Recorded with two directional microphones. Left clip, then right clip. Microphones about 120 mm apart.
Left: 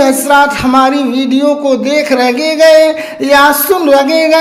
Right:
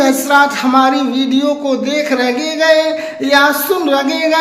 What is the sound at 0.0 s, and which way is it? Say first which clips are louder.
Speech: left 3 dB; 35° left (ahead or behind).